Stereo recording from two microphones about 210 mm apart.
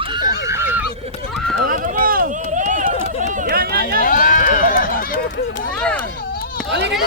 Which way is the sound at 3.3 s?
45° right (ahead or behind).